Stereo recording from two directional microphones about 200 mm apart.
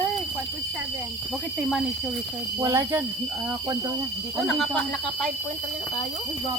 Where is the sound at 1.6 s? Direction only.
Centre (ahead or behind).